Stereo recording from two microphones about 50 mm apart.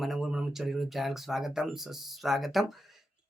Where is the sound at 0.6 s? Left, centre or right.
Centre.